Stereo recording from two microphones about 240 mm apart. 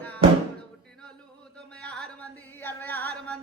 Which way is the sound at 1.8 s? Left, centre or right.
Centre.